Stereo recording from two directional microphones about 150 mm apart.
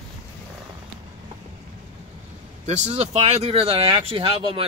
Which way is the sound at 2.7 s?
45° right (ahead or behind).